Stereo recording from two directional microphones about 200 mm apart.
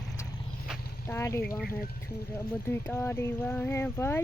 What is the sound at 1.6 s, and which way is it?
Speech, 45° left (ahead or behind).